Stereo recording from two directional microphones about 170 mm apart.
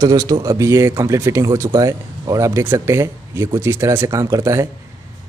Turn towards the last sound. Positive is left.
turn(degrees=-15)  # may be behind; listen again after turning